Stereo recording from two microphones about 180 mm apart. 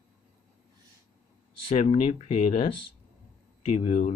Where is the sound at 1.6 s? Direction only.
35° left (ahead or behind).